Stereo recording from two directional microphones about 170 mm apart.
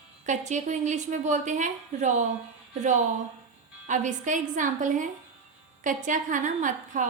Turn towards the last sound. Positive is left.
turn(degrees=-50)  # may be behind; listen again after turning